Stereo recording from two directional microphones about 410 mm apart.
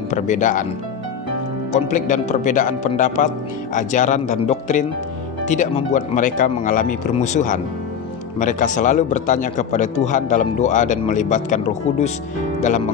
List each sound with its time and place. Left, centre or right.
0.1 s speech: centre
1.7 s speech: centre